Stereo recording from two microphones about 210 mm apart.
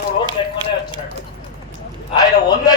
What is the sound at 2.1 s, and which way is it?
Speech, 20° left (ahead or behind).